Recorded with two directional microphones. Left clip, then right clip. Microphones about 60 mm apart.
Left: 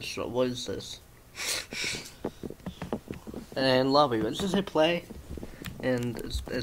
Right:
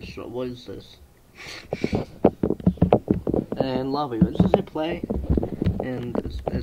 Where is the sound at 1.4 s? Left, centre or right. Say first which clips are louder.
Right 1 dB; centre.